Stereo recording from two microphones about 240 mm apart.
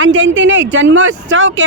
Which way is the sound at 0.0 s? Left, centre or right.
Right.